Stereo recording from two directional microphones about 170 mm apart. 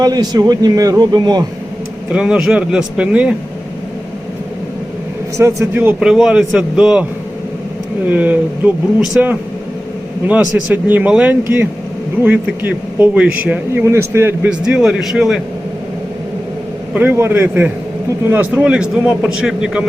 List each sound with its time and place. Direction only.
0.0 s a man's voice: 25° right (ahead or behind)
2.1 s a man's voice: 5° right (ahead or behind)
5.4 s speech: 15° right (ahead or behind)
6.1 s a man's voice: centre (ahead or behind)
8.1 s speech: 10° right (ahead or behind)
10.7 s speech: 10° right (ahead or behind)
14.6 s a man's voice: 5° right (ahead or behind)
16.9 s a man's voice: 10° right (ahead or behind)